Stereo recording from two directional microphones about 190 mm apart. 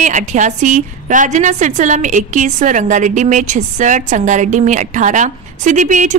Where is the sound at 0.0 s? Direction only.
40° right (ahead or behind).